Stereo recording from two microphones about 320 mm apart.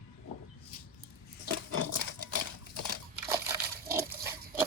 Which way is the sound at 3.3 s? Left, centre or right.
Centre.